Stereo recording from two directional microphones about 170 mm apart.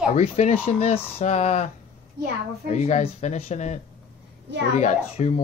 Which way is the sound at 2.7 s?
40° left (ahead or behind).